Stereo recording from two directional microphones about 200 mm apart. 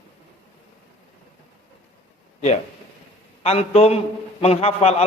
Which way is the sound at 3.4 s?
30° left (ahead or behind).